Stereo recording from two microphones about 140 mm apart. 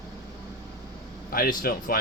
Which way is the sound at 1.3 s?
90° left.